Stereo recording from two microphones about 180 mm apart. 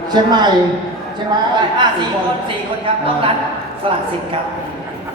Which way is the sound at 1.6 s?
25° right (ahead or behind).